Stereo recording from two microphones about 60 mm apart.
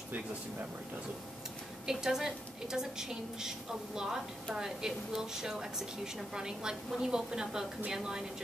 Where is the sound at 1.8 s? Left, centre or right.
Centre.